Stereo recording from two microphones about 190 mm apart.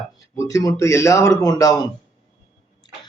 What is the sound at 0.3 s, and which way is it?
A man's voice, 20° left (ahead or behind).